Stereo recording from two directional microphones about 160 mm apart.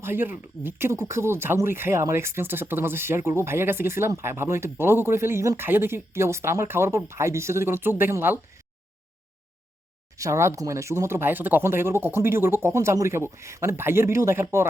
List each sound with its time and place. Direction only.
0.0 s speech: 15° right (ahead or behind)
10.2 s speech: 20° right (ahead or behind)